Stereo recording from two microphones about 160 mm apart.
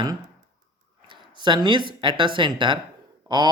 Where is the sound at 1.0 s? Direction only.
30° right (ahead or behind).